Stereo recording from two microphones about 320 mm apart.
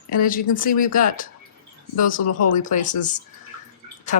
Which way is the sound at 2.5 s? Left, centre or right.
Left.